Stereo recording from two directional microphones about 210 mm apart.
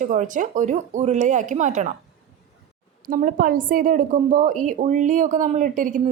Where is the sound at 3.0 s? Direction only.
40° right (ahead or behind).